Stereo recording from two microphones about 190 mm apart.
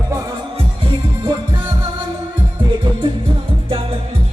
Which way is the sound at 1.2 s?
20° right (ahead or behind).